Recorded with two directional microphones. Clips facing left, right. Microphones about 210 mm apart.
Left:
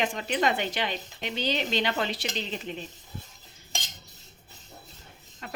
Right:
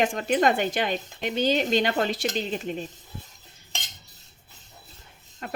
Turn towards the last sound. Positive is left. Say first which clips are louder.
# right 6 dB
turn(degrees=-50)  # may be behind; listen again after turning